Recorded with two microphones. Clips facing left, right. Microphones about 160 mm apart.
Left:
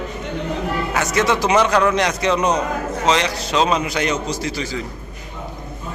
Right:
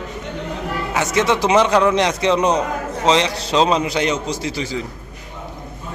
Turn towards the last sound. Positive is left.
turn(degrees=-25)  # may be behind; listen again after turning